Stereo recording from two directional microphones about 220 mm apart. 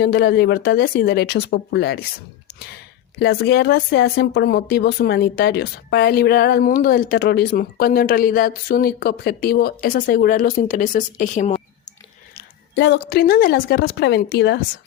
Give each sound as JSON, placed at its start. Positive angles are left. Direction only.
{"t": 0.0, "sound": "speech", "side_deg": 50}
{"t": 3.2, "sound": "speech", "side_deg": 50}
{"t": 12.4, "sound": "speech", "side_deg": 50}